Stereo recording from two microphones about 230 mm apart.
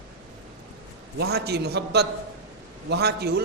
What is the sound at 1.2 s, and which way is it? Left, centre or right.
A man's voice, right.